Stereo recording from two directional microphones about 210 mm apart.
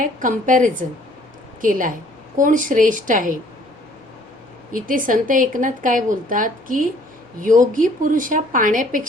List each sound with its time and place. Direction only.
0.0 s a woman's voice: 40° right (ahead or behind)
4.7 s a woman's voice: 40° right (ahead or behind)